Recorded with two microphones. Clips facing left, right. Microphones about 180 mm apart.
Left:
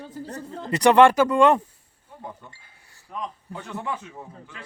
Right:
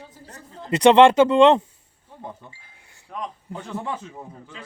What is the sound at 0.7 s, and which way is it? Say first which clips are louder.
Speech: right 2 dB; 20° right (ahead or behind).